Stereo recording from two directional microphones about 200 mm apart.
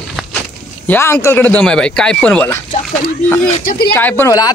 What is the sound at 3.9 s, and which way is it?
Speech, 10° left (ahead or behind).